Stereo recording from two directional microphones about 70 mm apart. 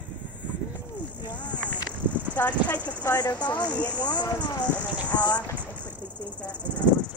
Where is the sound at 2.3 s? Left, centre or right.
Left.